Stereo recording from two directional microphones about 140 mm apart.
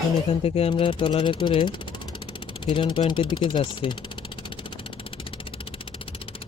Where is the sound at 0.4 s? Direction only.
45° left (ahead or behind).